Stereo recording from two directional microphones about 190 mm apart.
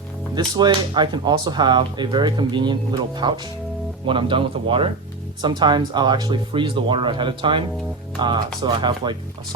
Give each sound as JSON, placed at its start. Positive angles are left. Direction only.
{"t": 0.3, "sound": "speech", "side_deg": -20}